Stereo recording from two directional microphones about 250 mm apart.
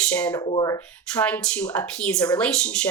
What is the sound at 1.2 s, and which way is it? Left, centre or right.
Speech, centre.